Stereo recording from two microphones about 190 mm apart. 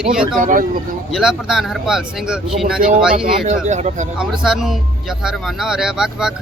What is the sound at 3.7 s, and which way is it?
Speech, 40° right (ahead or behind).